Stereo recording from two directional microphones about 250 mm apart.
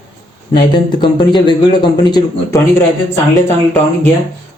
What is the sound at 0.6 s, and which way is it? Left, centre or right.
A man's voice, centre.